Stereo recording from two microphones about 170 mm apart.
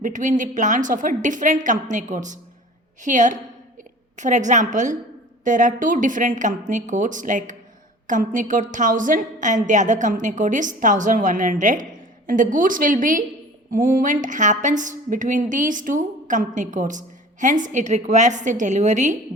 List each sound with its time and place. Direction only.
0.0 s a woman's voice: 50° right (ahead or behind)